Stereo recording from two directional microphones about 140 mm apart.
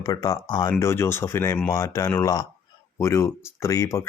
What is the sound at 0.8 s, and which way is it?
Speech, 20° left (ahead or behind).